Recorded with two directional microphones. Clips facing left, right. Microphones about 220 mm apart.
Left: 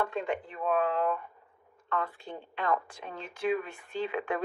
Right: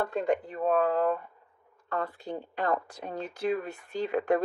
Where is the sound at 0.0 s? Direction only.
40° right (ahead or behind).